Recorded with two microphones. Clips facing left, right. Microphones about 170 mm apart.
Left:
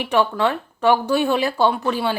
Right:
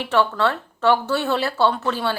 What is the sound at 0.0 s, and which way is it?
Speech, 15° left (ahead or behind).